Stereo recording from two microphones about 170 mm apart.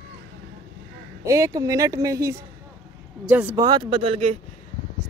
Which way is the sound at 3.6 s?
30° right (ahead or behind).